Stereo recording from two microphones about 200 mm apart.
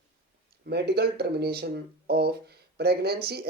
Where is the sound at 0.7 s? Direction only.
55° right (ahead or behind).